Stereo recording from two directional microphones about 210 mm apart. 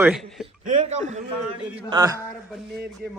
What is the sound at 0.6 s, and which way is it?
Speech, 35° right (ahead or behind).